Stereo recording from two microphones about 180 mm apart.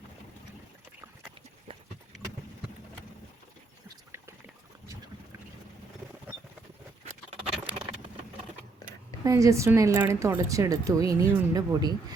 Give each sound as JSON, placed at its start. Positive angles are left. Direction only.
{"t": 1.7, "sound": "clip-clop", "side_deg": -30}
{"t": 7.1, "sound": "bird", "side_deg": -35}
{"t": 9.2, "sound": "a woman's voice", "side_deg": -15}